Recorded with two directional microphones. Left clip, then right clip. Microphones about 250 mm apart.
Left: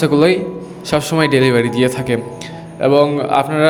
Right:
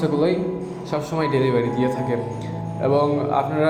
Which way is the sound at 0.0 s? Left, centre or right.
Left.